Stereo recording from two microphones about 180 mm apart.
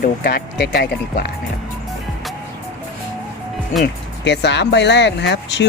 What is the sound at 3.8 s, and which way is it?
Speech, 75° left (ahead or behind).